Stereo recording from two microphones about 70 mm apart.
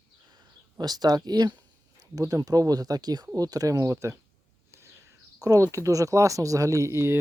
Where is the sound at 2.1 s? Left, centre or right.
Right.